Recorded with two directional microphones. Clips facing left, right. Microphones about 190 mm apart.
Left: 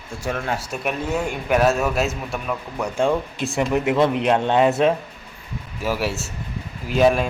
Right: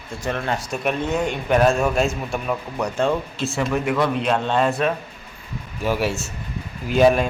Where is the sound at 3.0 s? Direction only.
15° left (ahead or behind).